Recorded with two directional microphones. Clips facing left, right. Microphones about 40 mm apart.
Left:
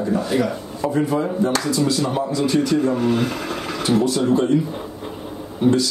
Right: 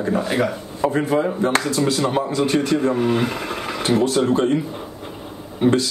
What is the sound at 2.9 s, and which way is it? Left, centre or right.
Speech, centre.